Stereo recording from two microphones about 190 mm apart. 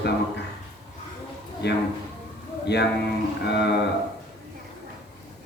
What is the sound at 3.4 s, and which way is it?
Speech, 60° left (ahead or behind).